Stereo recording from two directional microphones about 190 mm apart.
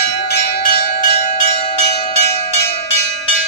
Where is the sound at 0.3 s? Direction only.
55° left (ahead or behind).